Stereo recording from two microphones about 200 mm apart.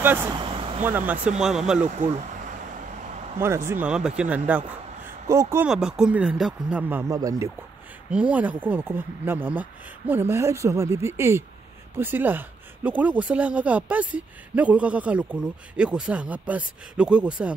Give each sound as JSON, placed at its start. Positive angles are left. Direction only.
{"t": 0.0, "sound": "speech", "side_deg": -10}
{"t": 0.3, "sound": "a sound", "side_deg": -25}
{"t": 0.8, "sound": "speech", "side_deg": -10}
{"t": 3.3, "sound": "speech", "side_deg": -15}
{"t": 8.1, "sound": "speech", "side_deg": -5}